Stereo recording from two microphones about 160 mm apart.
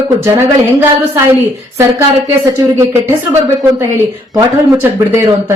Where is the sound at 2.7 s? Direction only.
15° right (ahead or behind).